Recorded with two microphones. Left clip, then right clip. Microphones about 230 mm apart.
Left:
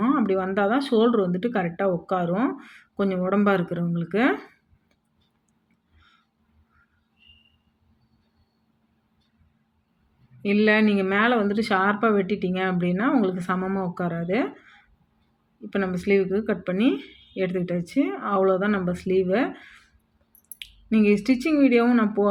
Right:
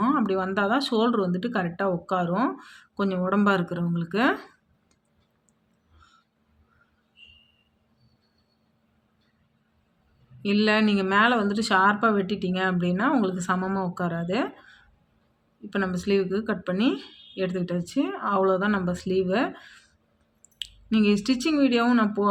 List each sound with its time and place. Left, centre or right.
0.0 s a sound: centre
0.6 s speech: centre
1.3 s speech: right
1.5 s speech: centre
10.5 s speech: centre
16.0 s speech: centre